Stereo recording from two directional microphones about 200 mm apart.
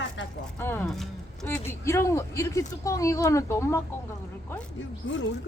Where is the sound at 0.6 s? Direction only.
10° left (ahead or behind).